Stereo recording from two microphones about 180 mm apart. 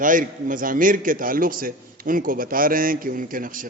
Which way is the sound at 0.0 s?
50° right (ahead or behind).